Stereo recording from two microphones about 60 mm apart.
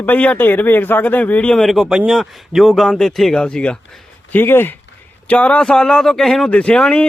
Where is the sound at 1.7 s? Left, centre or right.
Centre.